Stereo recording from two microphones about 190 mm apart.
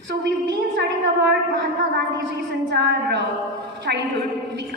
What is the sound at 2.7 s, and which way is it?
A woman's voice, 65° right (ahead or behind).